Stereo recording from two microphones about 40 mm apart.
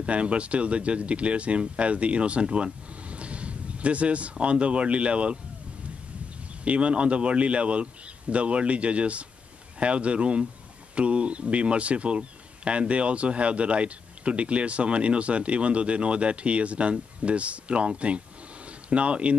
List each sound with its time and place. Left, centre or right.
0.0 s speech: right
6.6 s speech: right